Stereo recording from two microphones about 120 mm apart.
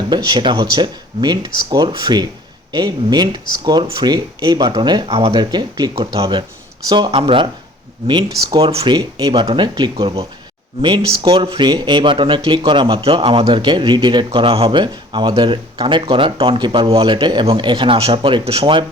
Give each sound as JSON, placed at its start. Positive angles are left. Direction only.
{"t": 0.1, "sound": "speech", "side_deg": -40}
{"t": 5.0, "sound": "speech", "side_deg": -50}
{"t": 8.9, "sound": "speech", "side_deg": -30}
{"t": 14.3, "sound": "speech", "side_deg": -50}